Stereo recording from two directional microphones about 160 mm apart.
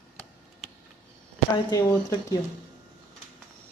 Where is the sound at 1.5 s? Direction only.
20° left (ahead or behind).